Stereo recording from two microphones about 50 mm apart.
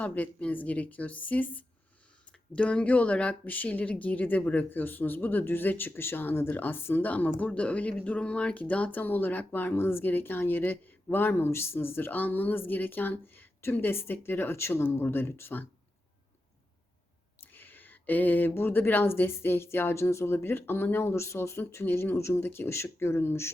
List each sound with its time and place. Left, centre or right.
0.0 s a woman's voice: left
9.7 s speech: left
17.4 s a sound: left
18.5 s speech: left
20.3 s speech: left